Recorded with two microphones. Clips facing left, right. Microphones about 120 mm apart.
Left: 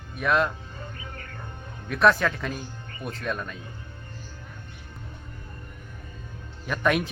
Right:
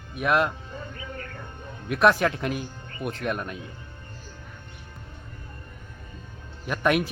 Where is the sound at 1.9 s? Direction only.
15° right (ahead or behind).